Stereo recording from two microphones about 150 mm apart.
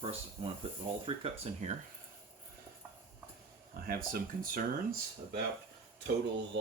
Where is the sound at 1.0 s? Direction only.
45° right (ahead or behind).